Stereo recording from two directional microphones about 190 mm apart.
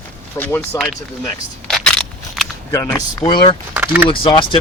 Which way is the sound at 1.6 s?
5° left (ahead or behind).